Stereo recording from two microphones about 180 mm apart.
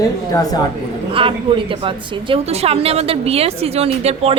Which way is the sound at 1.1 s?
30° right (ahead or behind).